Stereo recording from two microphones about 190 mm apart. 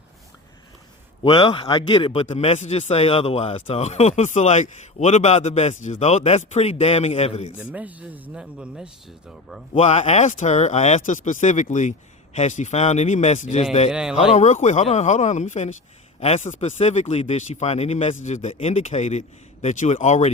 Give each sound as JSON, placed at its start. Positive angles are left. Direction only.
{"t": 1.2, "sound": "a man's voice", "side_deg": 25}
{"t": 7.6, "sound": "speech", "side_deg": -5}
{"t": 9.7, "sound": "a man's voice", "side_deg": 35}
{"t": 13.9, "sound": "speech", "side_deg": -5}
{"t": 14.3, "sound": "a man's voice", "side_deg": 35}